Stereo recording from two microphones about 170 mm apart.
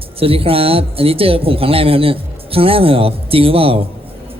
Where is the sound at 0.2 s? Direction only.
35° right (ahead or behind).